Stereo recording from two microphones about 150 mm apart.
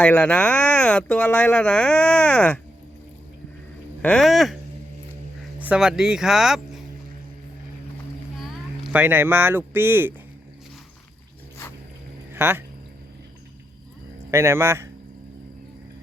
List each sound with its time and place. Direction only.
0.0 s speech: 10° left (ahead or behind)
4.0 s speech: 5° left (ahead or behind)
5.5 s speech: 10° right (ahead or behind)
8.4 s a sound: centre (ahead or behind)
9.0 s speech: 15° right (ahead or behind)
12.3 s speech: 15° right (ahead or behind)
14.3 s speech: 20° right (ahead or behind)